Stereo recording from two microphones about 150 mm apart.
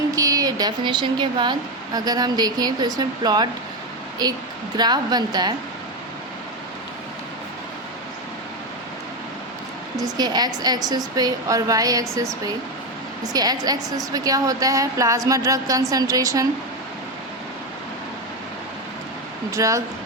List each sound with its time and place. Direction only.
0.2 s speech: 25° right (ahead or behind)
10.0 s speech: 25° right (ahead or behind)
19.5 s speech: 20° right (ahead or behind)